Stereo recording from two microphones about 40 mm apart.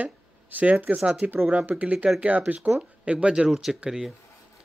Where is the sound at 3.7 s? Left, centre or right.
Centre.